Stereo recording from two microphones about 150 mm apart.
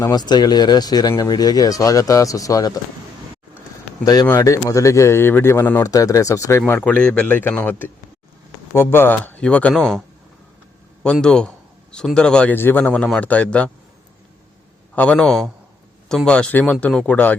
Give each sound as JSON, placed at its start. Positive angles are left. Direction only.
{"t": 0.0, "sound": "speech", "side_deg": 25}
{"t": 4.0, "sound": "a man's voice", "side_deg": 25}
{"t": 11.0, "sound": "a man's voice", "side_deg": 5}
{"t": 14.9, "sound": "a man's voice", "side_deg": 5}